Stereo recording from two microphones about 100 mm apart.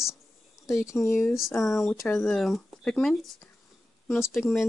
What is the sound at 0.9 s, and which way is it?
Speech, centre (ahead or behind).